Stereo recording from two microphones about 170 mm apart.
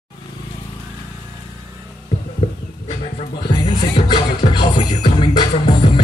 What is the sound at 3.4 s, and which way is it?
Music, 25° left (ahead or behind).